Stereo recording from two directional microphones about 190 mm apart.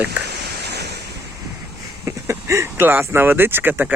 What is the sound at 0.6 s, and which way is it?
Waves, 60° right (ahead or behind).